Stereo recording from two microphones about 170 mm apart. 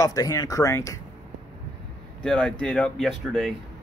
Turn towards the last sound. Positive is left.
turn(degrees=0)  # may be behind; listen again after turning